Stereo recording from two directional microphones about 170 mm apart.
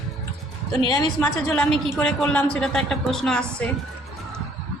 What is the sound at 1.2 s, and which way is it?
Speech, 5° left (ahead or behind).